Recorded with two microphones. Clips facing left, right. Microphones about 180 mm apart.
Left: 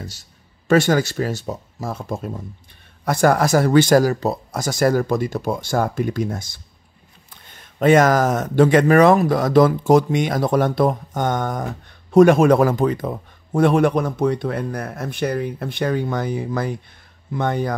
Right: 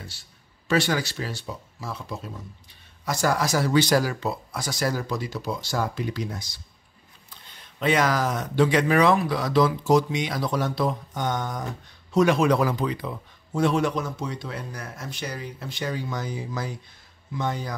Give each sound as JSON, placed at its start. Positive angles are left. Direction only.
{"t": 0.0, "sound": "speech", "side_deg": 40}